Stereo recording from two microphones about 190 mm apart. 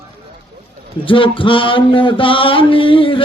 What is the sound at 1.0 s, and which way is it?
Mantra, 25° left (ahead or behind).